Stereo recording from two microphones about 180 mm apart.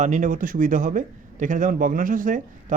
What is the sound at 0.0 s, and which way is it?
A man's voice, 45° right (ahead or behind).